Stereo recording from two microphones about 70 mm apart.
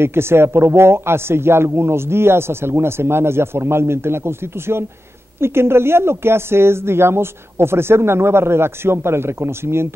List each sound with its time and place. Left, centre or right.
0.0 s speech: right